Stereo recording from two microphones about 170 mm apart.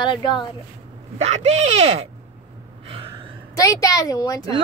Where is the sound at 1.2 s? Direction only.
40° right (ahead or behind).